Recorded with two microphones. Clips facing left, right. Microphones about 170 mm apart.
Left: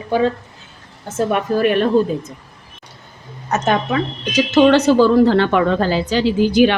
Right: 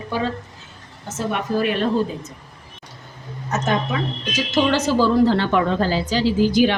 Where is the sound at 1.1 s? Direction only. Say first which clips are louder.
Left 5 dB; 55° left (ahead or behind).